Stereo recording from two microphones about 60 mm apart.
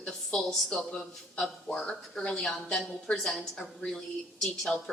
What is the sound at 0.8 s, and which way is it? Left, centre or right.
Speech, centre.